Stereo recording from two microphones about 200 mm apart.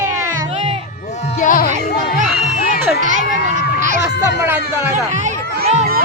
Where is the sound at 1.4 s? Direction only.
40° left (ahead or behind).